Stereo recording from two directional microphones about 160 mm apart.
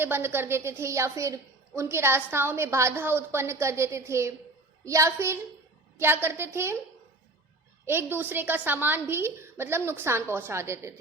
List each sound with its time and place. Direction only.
0.0 s a woman's voice: 15° right (ahead or behind)
7.9 s a woman's voice: 15° right (ahead or behind)